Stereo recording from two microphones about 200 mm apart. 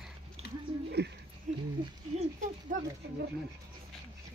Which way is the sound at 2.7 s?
45° right (ahead or behind).